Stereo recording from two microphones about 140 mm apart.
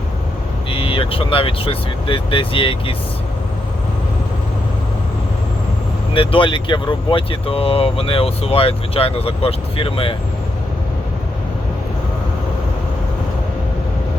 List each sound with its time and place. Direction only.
0.7 s speech: 40° left (ahead or behind)
6.1 s speech: 40° left (ahead or behind)